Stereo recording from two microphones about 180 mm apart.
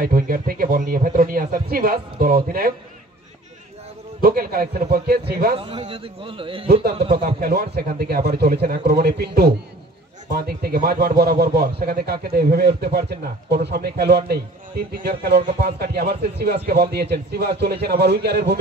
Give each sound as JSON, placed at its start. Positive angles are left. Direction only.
{"t": 0.0, "sound": "speech", "side_deg": -55}
{"t": 4.2, "sound": "speech", "side_deg": -55}
{"t": 5.6, "sound": "a man's voice", "side_deg": -25}
{"t": 7.3, "sound": "speech", "side_deg": -60}